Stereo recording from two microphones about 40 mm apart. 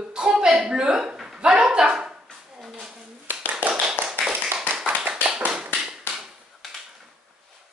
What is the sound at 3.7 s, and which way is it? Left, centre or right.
Tap, centre.